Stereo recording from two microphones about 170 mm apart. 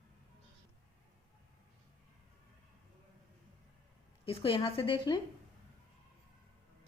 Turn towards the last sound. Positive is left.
turn(degrees=30)  # may be behind; listen again after turning